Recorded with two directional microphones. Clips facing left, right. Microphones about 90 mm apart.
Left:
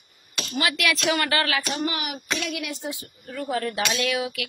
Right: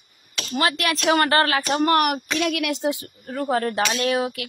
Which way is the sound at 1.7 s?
60° right (ahead or behind).